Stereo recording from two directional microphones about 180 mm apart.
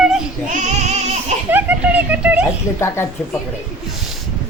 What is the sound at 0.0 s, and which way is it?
Child singing, 5° right (ahead or behind).